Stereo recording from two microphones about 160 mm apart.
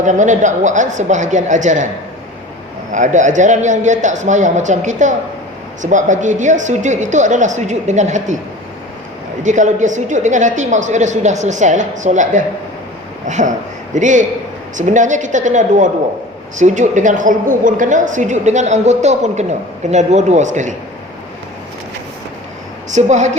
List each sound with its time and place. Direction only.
0.0 s a woman's voice: 50° right (ahead or behind)
2.9 s a woman's voice: 50° right (ahead or behind)
9.4 s a woman's voice: 50° right (ahead or behind)
22.9 s a woman's voice: 45° right (ahead or behind)